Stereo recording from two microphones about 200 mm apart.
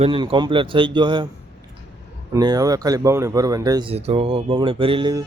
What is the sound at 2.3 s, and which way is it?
Speech, 20° right (ahead or behind).